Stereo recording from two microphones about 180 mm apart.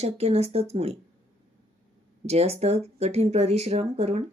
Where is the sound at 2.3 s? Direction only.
35° right (ahead or behind).